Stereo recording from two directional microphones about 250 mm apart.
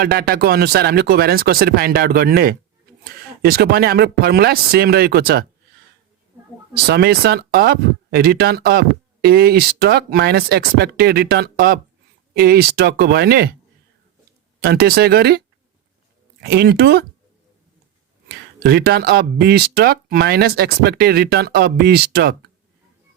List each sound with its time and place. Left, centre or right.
0.0 s speech: right
6.8 s speech: right
14.6 s speech: right
16.4 s speech: right
18.3 s speech: right